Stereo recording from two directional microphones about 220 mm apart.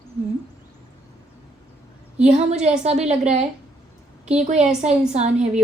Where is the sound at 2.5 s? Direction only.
30° right (ahead or behind).